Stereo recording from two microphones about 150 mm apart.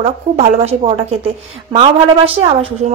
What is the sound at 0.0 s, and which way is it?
A woman's voice, 40° right (ahead or behind).